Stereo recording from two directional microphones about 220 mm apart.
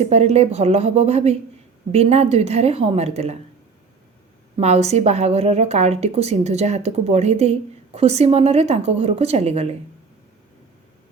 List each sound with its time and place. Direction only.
0.0 s a woman's voice: 30° right (ahead or behind)
4.5 s a woman's voice: 30° right (ahead or behind)